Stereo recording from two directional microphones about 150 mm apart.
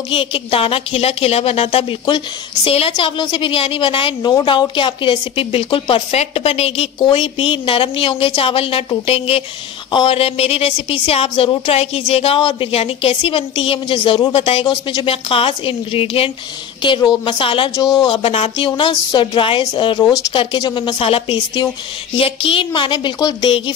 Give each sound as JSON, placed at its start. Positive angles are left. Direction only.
{"t": 0.1, "sound": "a woman's voice", "side_deg": 35}